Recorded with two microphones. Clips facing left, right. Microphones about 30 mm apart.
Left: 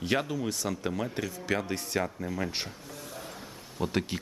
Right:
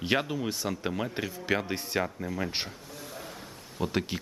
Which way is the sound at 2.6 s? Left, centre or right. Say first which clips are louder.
Even; centre.